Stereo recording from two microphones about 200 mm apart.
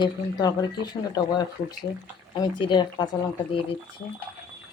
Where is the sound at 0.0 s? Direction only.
20° left (ahead or behind).